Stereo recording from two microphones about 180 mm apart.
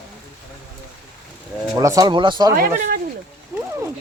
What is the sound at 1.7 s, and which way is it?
Speech, 20° right (ahead or behind).